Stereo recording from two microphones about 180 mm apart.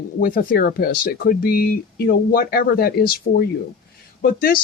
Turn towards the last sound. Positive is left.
turn(degrees=55)  # may be behind; listen again after turning